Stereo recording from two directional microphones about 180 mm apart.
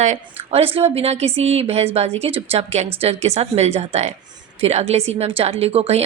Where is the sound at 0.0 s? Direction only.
35° right (ahead or behind).